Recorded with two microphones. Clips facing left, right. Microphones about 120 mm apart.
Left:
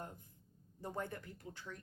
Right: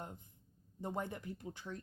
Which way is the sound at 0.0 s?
20° right (ahead or behind).